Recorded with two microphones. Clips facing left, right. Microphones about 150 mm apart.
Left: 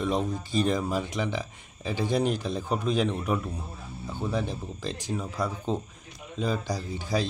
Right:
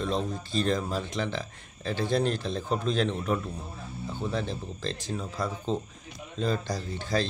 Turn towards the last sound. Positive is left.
turn(degrees=10)  # may be behind; listen again after turning